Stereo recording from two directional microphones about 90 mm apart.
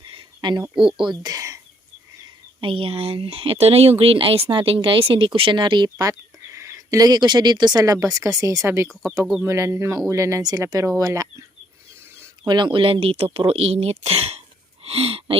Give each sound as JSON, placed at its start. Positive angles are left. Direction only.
{"t": 0.0, "sound": "a sound", "side_deg": -75}
{"t": 1.2, "sound": "speech", "side_deg": -40}
{"t": 2.6, "sound": "speech", "side_deg": -85}
{"t": 6.0, "sound": "speech", "side_deg": -35}
{"t": 12.5, "sound": "speech", "side_deg": -60}